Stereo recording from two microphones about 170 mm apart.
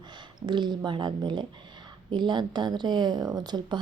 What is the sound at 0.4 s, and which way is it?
Speech, 25° right (ahead or behind).